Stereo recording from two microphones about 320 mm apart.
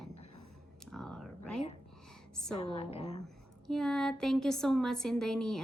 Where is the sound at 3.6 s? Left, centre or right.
Centre.